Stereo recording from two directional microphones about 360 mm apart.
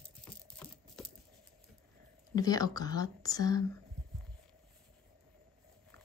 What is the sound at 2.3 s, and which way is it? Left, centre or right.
Speech, centre.